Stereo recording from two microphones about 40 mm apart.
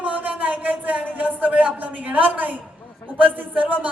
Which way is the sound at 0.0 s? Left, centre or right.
Right.